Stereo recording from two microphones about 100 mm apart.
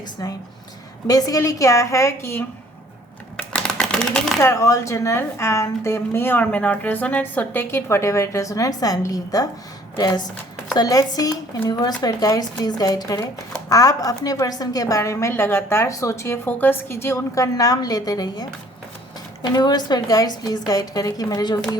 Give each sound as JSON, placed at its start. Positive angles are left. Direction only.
{"t": 1.0, "sound": "a woman's voice", "side_deg": 40}
{"t": 3.3, "sound": "a sound", "side_deg": 10}
{"t": 4.4, "sound": "a woman's voice", "side_deg": 30}